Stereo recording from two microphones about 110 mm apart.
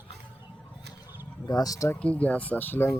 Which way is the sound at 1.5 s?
35° left (ahead or behind).